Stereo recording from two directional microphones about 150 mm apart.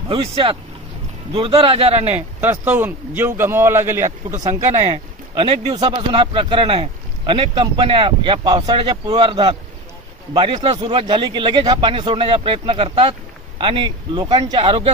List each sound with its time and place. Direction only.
0.1 s speech: 35° right (ahead or behind)
2.0 s a man's voice: 15° right (ahead or behind)
4.7 s speech: 30° right (ahead or behind)